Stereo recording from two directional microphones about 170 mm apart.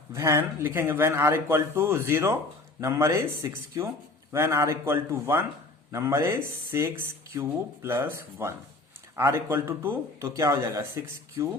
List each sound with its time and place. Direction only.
0.1 s speech: 15° right (ahead or behind)